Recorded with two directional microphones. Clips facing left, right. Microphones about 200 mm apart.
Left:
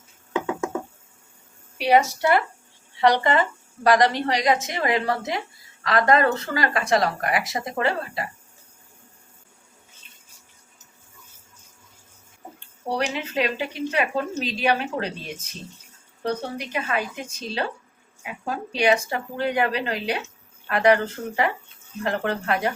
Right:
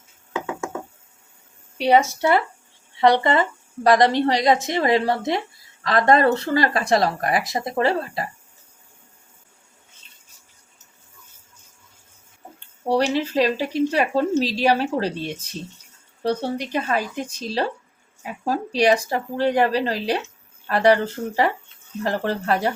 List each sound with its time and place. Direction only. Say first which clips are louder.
1.8 s speech: right 2 dB; 25° right (ahead or behind)
13.1 s speech: right 5 dB; 35° right (ahead or behind)
16.2 s speech: right 4 dB; 35° right (ahead or behind)